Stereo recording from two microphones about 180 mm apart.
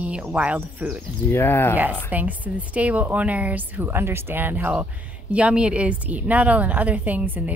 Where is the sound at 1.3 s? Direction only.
10° left (ahead or behind).